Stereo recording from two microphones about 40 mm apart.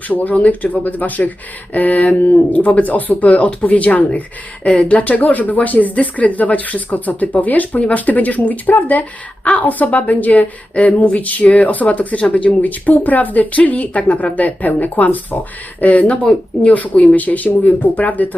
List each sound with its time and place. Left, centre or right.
0.1 s a woman's voice: left